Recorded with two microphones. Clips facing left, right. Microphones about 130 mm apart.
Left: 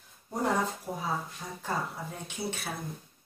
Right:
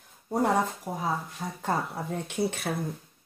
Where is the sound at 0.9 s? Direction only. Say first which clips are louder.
Right 2 dB; 40° right (ahead or behind).